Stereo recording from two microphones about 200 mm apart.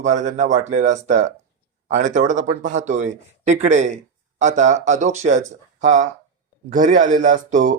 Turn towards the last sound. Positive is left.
turn(degrees=-40)  # may be behind; listen again after turning